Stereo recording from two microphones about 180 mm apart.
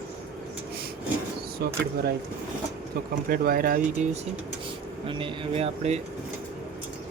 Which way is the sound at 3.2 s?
55° right (ahead or behind).